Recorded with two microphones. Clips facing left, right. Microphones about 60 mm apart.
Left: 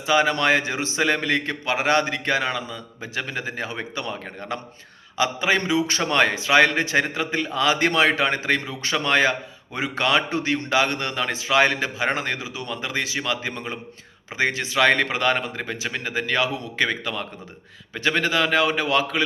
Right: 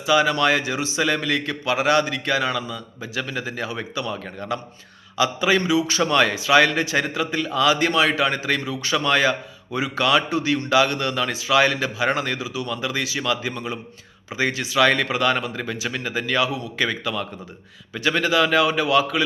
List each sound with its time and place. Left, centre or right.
0.0 s a man's voice: left
7.9 s a man's voice: left
13.5 s a man's voice: left